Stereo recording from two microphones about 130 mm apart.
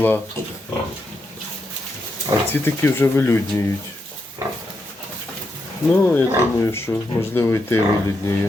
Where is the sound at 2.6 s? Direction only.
15° left (ahead or behind).